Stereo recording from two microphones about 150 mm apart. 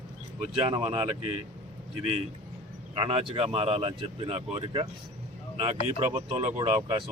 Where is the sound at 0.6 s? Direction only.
40° right (ahead or behind).